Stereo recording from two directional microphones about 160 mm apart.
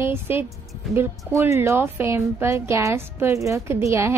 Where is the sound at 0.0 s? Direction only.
15° right (ahead or behind).